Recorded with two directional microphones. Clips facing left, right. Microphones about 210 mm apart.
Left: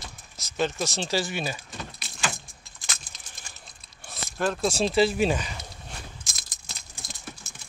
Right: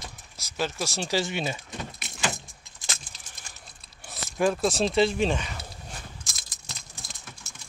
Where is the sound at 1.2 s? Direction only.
20° right (ahead or behind).